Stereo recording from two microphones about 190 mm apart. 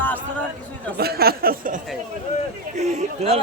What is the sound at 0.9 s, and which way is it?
Speech, 55° right (ahead or behind).